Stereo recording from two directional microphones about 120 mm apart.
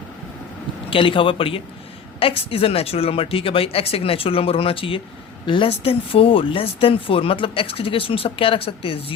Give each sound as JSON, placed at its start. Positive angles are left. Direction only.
{"t": 0.9, "sound": "speech", "side_deg": 45}